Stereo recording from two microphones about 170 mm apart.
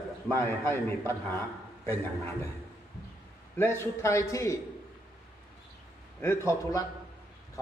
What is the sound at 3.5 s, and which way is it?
A man's voice, 15° left (ahead or behind).